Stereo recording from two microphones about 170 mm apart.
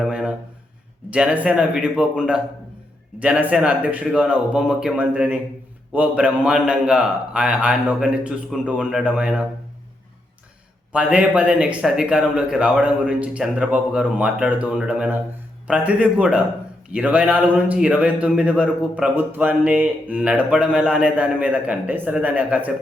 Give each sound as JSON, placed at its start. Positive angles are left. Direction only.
{"t": 0.0, "sound": "a sound", "side_deg": -5}
{"t": 1.1, "sound": "a man's voice", "side_deg": -5}
{"t": 10.9, "sound": "a man's voice", "side_deg": -5}